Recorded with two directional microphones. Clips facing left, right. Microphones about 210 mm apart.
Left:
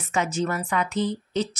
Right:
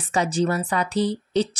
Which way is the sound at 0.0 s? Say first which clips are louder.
Right 3 dB; 35° right (ahead or behind).